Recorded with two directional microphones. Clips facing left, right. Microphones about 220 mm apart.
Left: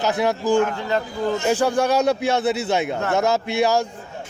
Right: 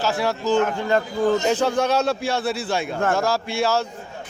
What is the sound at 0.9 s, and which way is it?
Speech, 50° right (ahead or behind).